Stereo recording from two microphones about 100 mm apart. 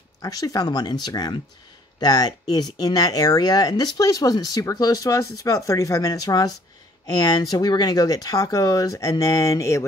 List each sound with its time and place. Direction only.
0.2 s speech: 40° left (ahead or behind)